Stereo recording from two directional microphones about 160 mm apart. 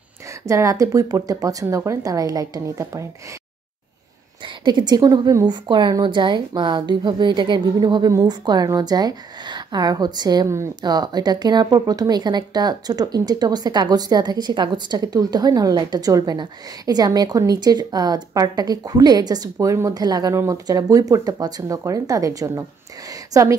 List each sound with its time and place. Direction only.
0.5 s a woman's voice: 20° right (ahead or behind)
4.6 s a woman's voice: 25° right (ahead or behind)